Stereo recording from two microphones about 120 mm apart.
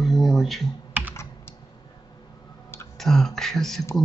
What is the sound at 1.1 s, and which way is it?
Computer keyboard, 20° left (ahead or behind).